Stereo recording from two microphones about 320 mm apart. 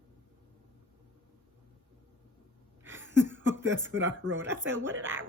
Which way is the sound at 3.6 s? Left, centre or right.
Centre.